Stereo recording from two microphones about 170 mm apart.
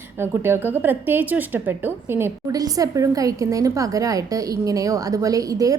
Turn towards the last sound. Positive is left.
turn(degrees=-20)  # may be behind; listen again after turning